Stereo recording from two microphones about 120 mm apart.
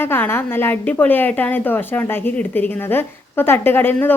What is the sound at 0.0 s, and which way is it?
A woman's voice, 20° left (ahead or behind).